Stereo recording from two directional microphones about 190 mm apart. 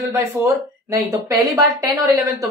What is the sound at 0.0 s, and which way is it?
Speech, 15° right (ahead or behind).